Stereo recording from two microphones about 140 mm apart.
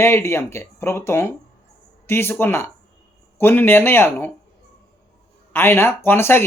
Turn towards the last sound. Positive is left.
turn(degrees=15)  # may be behind; listen again after turning